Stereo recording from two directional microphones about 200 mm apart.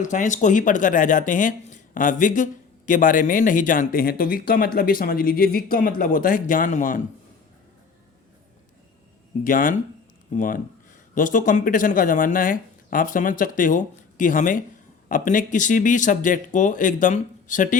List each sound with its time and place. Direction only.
0.0 s speech: 40° left (ahead or behind)
9.4 s speech: 45° left (ahead or behind)